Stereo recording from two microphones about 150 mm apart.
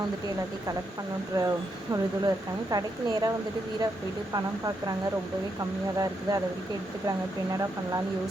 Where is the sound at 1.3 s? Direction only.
20° right (ahead or behind).